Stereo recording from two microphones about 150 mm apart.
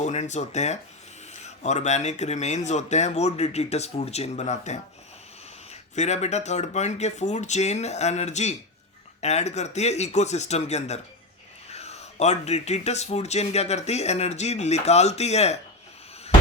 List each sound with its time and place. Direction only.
0.0 s speech: 50° left (ahead or behind)
5.9 s speech: 50° left (ahead or behind)